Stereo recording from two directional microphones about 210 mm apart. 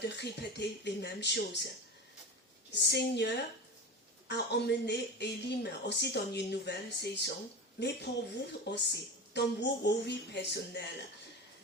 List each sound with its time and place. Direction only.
0.0 s speech: 55° left (ahead or behind)
2.7 s speech: 55° left (ahead or behind)